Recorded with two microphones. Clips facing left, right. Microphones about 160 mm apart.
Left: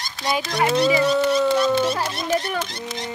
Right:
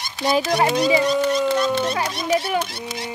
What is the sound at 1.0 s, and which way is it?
Speech, 5° left (ahead or behind).